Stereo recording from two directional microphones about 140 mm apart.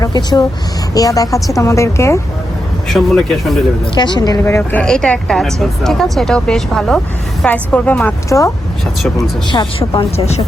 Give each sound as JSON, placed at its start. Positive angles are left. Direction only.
{"t": 0.0, "sound": "speech", "side_deg": 30}
{"t": 2.9, "sound": "speech", "side_deg": 5}
{"t": 3.9, "sound": "speech", "side_deg": 30}
{"t": 4.4, "sound": "speech", "side_deg": 20}
{"t": 4.8, "sound": "a woman's voice", "side_deg": 5}
{"t": 8.3, "sound": "speech", "side_deg": 20}
{"t": 9.5, "sound": "speech", "side_deg": 35}